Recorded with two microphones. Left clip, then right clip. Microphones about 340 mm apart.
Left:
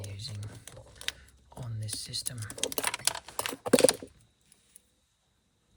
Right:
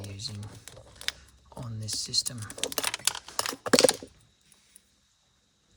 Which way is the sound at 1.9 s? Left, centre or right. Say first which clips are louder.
Right 8 dB; centre.